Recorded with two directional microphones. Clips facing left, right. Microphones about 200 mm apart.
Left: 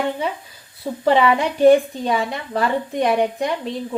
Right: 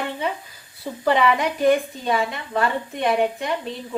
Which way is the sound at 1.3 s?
30° left (ahead or behind).